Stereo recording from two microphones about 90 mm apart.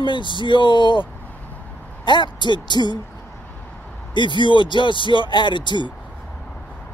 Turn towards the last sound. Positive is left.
turn(degrees=60)  # may be behind; listen again after turning